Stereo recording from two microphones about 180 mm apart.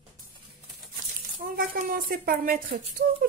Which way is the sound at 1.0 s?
45° right (ahead or behind).